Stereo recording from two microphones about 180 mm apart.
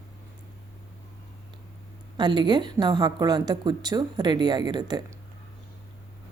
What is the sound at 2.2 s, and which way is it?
A woman's voice, 25° right (ahead or behind).